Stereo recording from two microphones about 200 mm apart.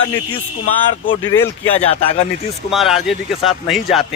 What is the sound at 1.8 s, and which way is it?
Speech, 30° left (ahead or behind).